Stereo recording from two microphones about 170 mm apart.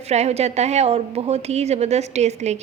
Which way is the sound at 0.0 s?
40° right (ahead or behind).